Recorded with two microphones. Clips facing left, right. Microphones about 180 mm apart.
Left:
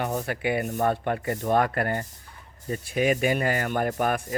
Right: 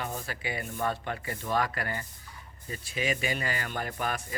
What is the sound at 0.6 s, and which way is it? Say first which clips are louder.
Speech: left 7 dB; 45° left (ahead or behind).